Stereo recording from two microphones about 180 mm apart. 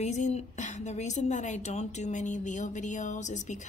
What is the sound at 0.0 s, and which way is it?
A woman's voice, 40° left (ahead or behind).